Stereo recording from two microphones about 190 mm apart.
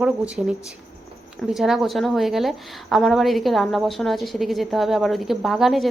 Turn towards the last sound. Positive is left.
turn(degrees=0)  # may be behind; listen again after turning